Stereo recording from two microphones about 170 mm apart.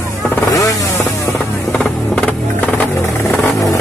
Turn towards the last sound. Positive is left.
turn(degrees=0)  # may be behind; listen again after turning